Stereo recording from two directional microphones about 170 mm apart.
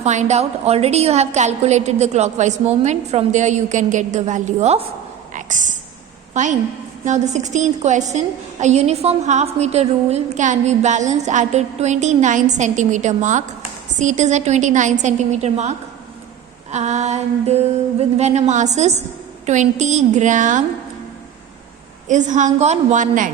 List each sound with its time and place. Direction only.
0.0 s a woman's voice: 45° right (ahead or behind)
5.3 s a sound: 50° right (ahead or behind)
6.3 s a woman's voice: 45° right (ahead or behind)
16.7 s a woman's voice: 45° right (ahead or behind)
22.0 s a woman's voice: 45° right (ahead or behind)